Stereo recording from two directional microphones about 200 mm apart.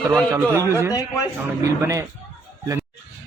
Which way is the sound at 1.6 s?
15° right (ahead or behind).